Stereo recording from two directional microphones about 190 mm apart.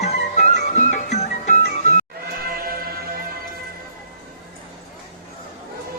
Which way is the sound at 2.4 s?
50° right (ahead or behind).